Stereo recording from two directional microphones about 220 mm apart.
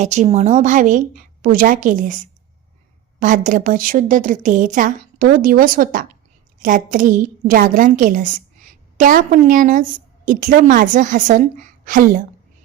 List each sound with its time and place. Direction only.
0.0 s a woman's voice: 30° right (ahead or behind)
3.2 s a woman's voice: 35° right (ahead or behind)